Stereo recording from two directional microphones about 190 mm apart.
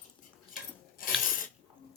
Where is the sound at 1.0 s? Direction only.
45° left (ahead or behind).